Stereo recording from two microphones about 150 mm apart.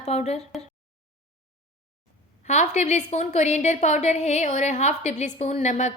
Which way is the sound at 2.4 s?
50° left (ahead or behind).